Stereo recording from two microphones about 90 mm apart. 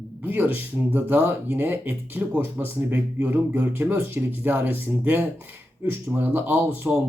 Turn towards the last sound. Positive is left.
turn(degrees=-20)  # may be behind; listen again after turning